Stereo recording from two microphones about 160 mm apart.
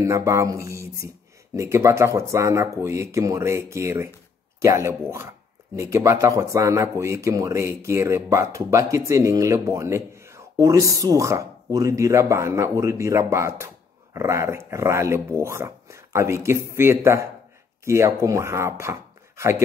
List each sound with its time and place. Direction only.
0.0 s speech: 20° right (ahead or behind)